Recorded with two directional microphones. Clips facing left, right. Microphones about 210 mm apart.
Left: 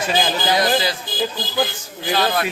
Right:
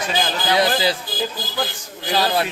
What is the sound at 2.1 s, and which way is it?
Speech, 30° right (ahead or behind).